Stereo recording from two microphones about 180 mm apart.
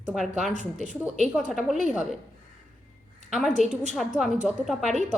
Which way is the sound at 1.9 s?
Centre (ahead or behind).